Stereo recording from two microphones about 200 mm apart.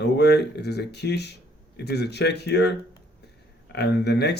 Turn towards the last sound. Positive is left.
turn(degrees=55)  # may be behind; listen again after turning